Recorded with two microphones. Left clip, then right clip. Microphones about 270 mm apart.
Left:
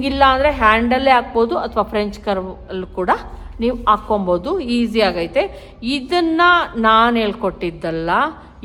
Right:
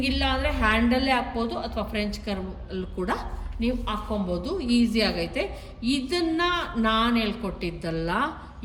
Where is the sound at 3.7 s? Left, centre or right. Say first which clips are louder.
Left 16 dB; centre.